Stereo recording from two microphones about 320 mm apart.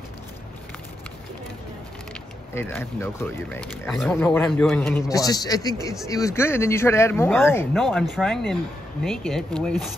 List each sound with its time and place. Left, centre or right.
2.5 s speech: centre